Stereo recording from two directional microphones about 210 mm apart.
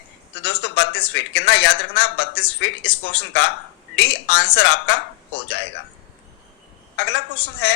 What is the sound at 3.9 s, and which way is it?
A man's voice, 55° left (ahead or behind).